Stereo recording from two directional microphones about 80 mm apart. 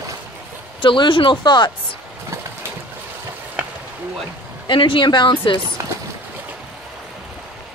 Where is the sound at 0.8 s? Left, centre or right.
Left.